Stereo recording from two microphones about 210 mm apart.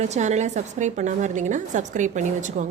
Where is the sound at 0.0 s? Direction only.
35° right (ahead or behind).